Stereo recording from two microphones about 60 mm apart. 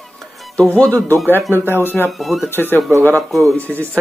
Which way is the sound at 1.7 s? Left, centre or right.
Left.